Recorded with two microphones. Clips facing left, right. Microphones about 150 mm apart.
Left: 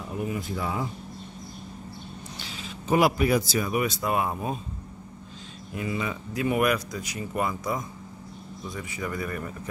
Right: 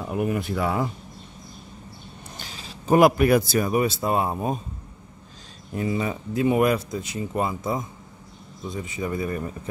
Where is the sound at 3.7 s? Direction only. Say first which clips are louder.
Right 2 dB; 30° right (ahead or behind).